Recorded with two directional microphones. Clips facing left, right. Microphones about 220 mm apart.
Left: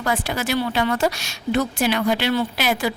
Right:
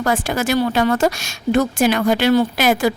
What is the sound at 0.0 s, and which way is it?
Speech, 45° right (ahead or behind).